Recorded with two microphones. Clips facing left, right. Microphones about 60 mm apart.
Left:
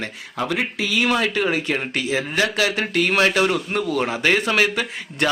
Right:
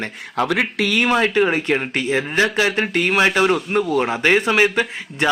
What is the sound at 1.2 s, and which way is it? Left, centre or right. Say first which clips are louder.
Speech: right 4 dB; centre.